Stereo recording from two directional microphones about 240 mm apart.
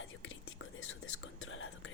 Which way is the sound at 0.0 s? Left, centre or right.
Left.